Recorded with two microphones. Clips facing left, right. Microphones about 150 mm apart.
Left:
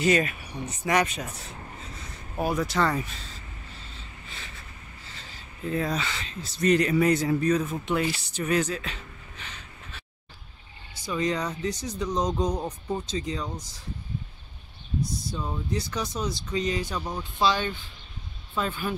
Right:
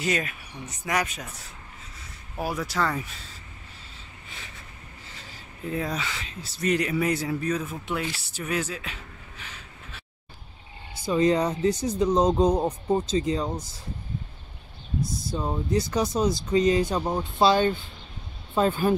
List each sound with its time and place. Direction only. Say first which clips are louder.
0.0 s speech: left 5 dB; centre (ahead or behind)
5.7 s speech: left 2 dB; 10° right (ahead or behind)
11.1 s speech: right 6 dB; 30° right (ahead or behind)
15.3 s speech: right 7 dB; 35° right (ahead or behind)